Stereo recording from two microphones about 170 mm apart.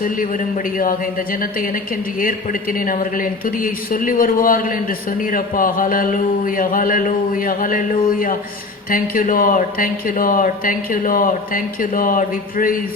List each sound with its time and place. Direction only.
0.0 s a man's voice: 55° left (ahead or behind)